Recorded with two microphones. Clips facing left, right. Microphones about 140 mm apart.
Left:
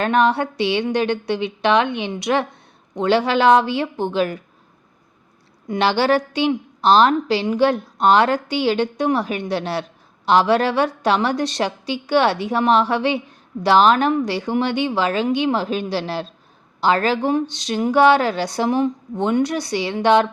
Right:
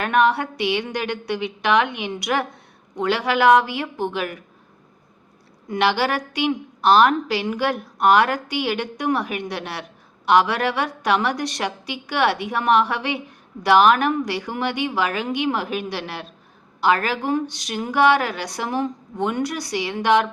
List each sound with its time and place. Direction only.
0.0 s a woman's voice: 30° left (ahead or behind)
5.6 s a woman's voice: 25° left (ahead or behind)